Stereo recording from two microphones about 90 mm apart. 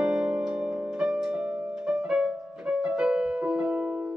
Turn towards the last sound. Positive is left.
turn(degrees=-10)  # may be behind; listen again after turning